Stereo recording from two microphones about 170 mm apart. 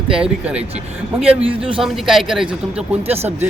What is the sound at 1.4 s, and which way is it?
Speech, 30° right (ahead or behind).